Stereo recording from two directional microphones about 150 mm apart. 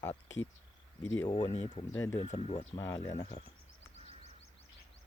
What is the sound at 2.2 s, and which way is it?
Speech, 45° left (ahead or behind).